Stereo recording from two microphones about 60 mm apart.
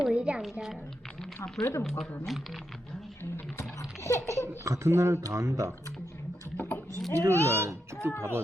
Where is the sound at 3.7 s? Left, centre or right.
Left.